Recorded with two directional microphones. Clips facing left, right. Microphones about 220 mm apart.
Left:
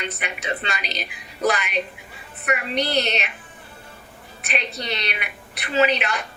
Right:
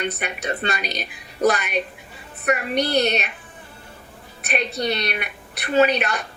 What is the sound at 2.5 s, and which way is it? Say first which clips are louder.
Speech: right 3 dB; 50° right (ahead or behind).